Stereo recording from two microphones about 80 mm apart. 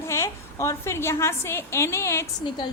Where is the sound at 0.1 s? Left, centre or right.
Left.